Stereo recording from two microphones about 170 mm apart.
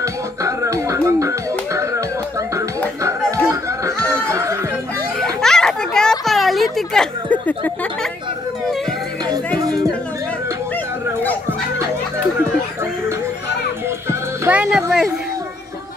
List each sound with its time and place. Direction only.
0.0 s music: 20° right (ahead or behind)
3.0 s chatter: 20° right (ahead or behind)
3.4 s snicker: 15° right (ahead or behind)
5.2 s a sound: 5° left (ahead or behind)
13.8 s music: 15° right (ahead or behind)